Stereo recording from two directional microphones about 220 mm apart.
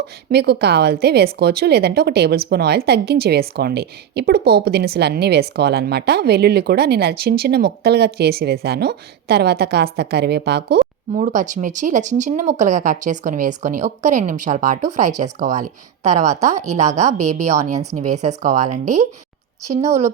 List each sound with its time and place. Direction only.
0.3 s a woman's voice: 50° right (ahead or behind)
11.1 s speech: 35° right (ahead or behind)